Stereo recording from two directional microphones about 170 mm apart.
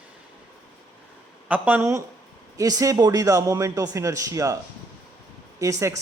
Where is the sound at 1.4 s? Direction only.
10° right (ahead or behind).